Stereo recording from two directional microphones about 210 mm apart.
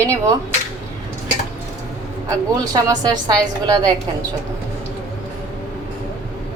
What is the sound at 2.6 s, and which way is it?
Speech, 20° right (ahead or behind).